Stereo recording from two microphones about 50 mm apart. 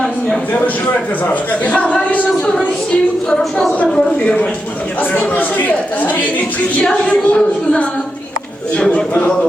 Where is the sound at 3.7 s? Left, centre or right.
Left.